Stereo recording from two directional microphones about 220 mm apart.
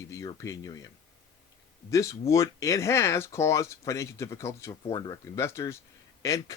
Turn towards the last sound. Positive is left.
turn(degrees=15)  # may be behind; listen again after turning